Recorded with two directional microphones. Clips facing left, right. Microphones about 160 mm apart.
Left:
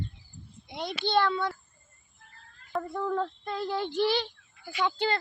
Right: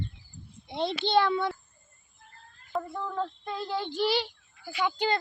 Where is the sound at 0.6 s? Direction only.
25° right (ahead or behind).